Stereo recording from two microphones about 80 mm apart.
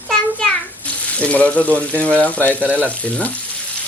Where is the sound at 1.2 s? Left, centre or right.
Centre.